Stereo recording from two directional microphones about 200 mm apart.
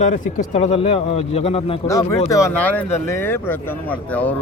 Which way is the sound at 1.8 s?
15° left (ahead or behind).